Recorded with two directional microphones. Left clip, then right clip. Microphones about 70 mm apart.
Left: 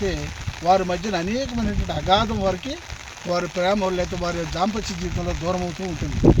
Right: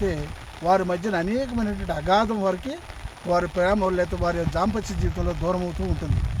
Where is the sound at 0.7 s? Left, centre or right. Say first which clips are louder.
Left 2 dB; centre.